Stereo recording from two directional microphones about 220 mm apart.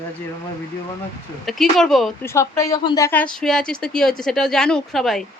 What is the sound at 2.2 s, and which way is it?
Speech, 15° left (ahead or behind).